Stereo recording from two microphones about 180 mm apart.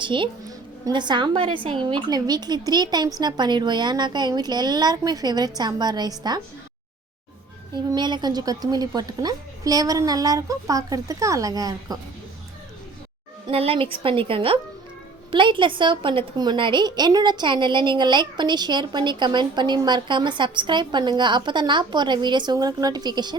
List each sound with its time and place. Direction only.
0.0 s a woman's voice: 25° right (ahead or behind)
7.9 s a woman's voice: 25° right (ahead or behind)
13.5 s a woman's voice: 30° right (ahead or behind)